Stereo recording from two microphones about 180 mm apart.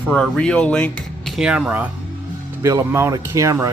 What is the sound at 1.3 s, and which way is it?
Speech, 5° right (ahead or behind).